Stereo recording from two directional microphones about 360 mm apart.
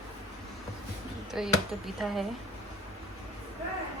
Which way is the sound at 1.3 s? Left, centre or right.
Centre.